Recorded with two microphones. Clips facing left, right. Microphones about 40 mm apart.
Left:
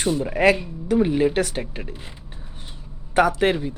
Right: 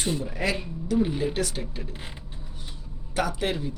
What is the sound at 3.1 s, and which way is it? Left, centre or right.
Speech, left.